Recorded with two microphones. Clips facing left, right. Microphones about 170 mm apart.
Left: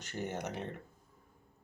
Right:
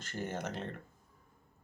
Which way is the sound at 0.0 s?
15° left (ahead or behind).